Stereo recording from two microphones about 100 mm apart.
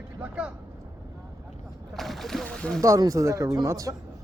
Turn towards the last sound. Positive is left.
turn(degrees=-35)  # may be behind; listen again after turning